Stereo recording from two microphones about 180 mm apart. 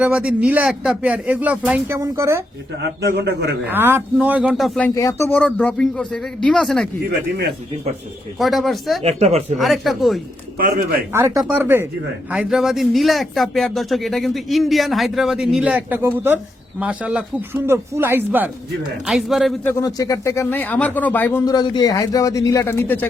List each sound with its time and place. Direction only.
0.0 s speech: 5° right (ahead or behind)
2.8 s a man's voice: 65° right (ahead or behind)
3.7 s speech: 10° right (ahead or behind)
4.9 s speech: 15° left (ahead or behind)
8.4 s speech: centre (ahead or behind)
9.0 s speech: 35° right (ahead or behind)
9.6 s speech: centre (ahead or behind)
11.1 s speech: 15° right (ahead or behind)
19.6 s speech: 20° left (ahead or behind)
21.5 s speech: 25° left (ahead or behind)